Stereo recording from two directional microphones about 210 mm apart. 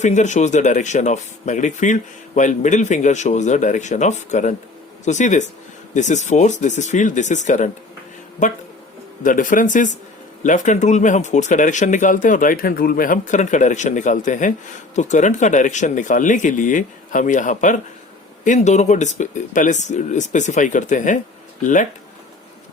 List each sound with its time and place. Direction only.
0.0 s speech: 35° left (ahead or behind)
9.2 s speech: 40° left (ahead or behind)